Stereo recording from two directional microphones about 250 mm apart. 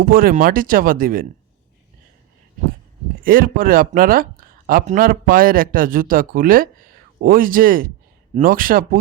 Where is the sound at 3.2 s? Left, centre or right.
Right.